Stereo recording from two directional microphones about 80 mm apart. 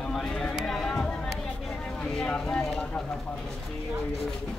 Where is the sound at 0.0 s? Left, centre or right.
Centre.